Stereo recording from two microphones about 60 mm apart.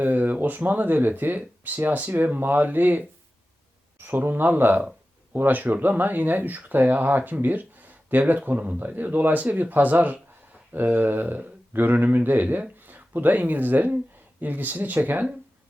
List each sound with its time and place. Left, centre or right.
0.0 s speech: right